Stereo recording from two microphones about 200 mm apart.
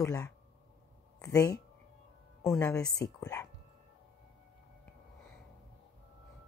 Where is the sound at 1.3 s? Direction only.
15° left (ahead or behind).